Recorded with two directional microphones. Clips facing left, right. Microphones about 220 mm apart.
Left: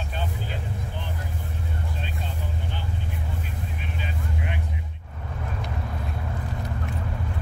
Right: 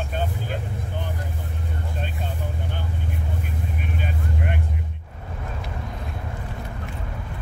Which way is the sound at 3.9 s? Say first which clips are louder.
Right 3 dB; 50° right (ahead or behind).